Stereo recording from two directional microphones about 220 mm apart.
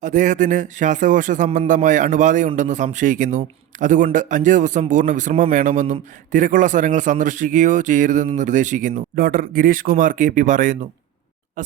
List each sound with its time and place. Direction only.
0.0 s a man's voice: 35° right (ahead or behind)